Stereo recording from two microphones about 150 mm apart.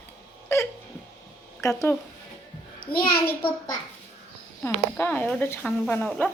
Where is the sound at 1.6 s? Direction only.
20° left (ahead or behind).